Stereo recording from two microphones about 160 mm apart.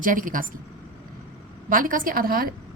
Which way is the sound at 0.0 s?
55° right (ahead or behind).